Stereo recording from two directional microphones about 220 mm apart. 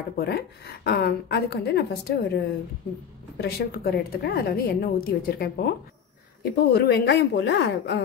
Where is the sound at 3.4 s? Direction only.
45° left (ahead or behind).